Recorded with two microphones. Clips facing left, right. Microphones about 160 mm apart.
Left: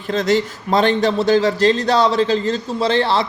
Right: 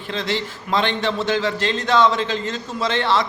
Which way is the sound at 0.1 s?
45° left (ahead or behind).